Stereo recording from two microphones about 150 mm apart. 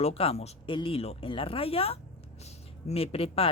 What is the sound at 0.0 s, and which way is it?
Speech, 40° left (ahead or behind).